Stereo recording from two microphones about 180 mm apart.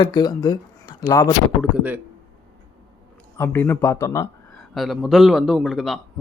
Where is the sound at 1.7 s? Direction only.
10° right (ahead or behind).